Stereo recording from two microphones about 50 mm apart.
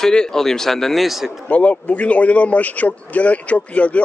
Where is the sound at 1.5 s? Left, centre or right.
Left.